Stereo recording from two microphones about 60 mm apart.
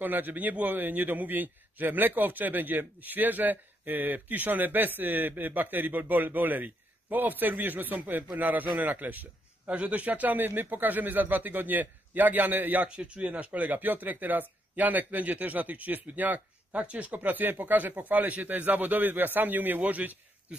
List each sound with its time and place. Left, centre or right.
0.0 s a man's voice: right
12.8 s a man's voice: centre